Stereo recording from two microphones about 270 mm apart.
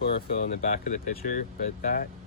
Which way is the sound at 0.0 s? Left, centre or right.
Left.